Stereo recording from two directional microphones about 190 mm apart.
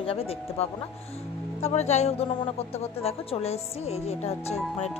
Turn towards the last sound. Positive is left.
turn(degrees=35)  # may be behind; listen again after turning